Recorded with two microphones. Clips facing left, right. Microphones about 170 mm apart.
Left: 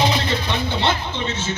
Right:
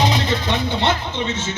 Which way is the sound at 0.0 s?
20° right (ahead or behind).